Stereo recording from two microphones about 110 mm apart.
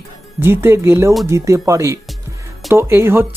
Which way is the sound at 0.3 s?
20° right (ahead or behind).